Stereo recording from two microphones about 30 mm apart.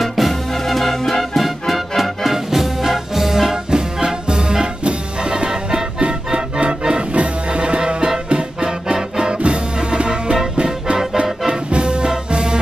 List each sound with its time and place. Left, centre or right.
0.0 s music: centre
3.7 s music: right
8.9 s music: right
9.4 s music: right
11.4 s music: right